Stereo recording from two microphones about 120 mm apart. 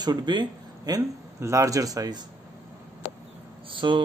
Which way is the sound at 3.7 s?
45° right (ahead or behind).